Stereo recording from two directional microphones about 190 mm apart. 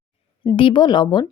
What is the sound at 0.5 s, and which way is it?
Speech, 25° left (ahead or behind).